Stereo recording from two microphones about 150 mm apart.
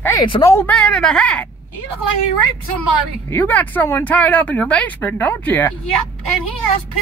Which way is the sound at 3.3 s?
15° left (ahead or behind).